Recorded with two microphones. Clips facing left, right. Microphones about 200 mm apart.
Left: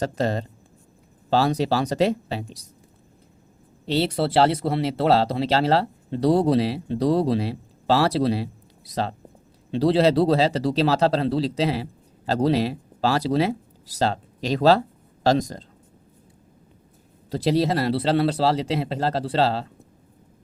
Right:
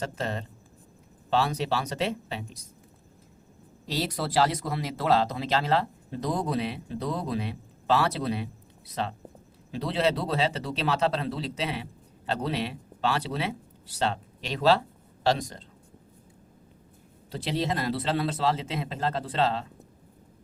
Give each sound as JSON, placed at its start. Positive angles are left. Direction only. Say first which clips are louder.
{"t": 0.0, "sound": "speech", "louder": "left 8 dB", "side_deg": 35}
{"t": 3.8, "sound": "speech", "louder": "left 8 dB", "side_deg": 30}
{"t": 9.7, "sound": "speech", "louder": "left 9 dB", "side_deg": 35}
{"t": 17.3, "sound": "speech", "louder": "left 8 dB", "side_deg": 40}